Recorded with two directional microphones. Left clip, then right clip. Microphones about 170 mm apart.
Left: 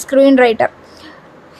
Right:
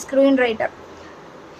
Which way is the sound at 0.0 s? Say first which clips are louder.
Left 7 dB; 35° left (ahead or behind).